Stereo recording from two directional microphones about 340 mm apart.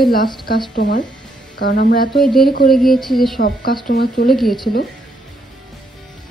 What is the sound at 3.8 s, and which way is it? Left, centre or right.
Speech, left.